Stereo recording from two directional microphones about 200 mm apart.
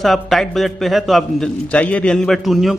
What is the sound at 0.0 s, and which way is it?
A man's voice, centre (ahead or behind).